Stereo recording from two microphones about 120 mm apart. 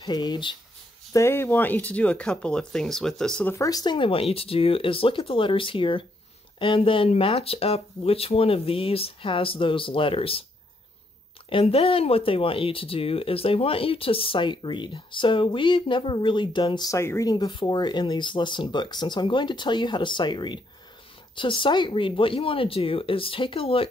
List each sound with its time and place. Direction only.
0.0 s speech: 35° left (ahead or behind)
1.1 s speech: 20° left (ahead or behind); by 3.4 s 5° left (ahead or behind)
3.4 s speech: 25° left (ahead or behind); by 10.4 s 50° left (ahead or behind)
11.4 s speech: 50° left (ahead or behind)
16.9 s speech: 25° left (ahead or behind); by 23.9 s 50° left (ahead or behind)